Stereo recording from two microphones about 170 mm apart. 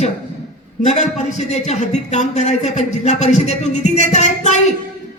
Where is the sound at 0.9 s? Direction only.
45° left (ahead or behind).